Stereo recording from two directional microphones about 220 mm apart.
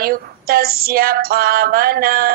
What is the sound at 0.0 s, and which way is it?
Female singing, 45° right (ahead or behind).